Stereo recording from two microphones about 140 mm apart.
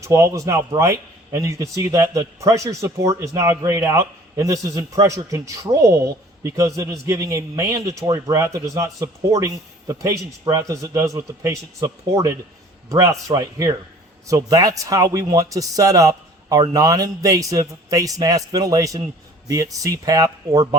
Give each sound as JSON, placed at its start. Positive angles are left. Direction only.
{"t": 0.0, "sound": "a man's voice", "side_deg": -20}